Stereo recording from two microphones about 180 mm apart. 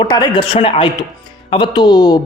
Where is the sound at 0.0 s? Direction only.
25° left (ahead or behind).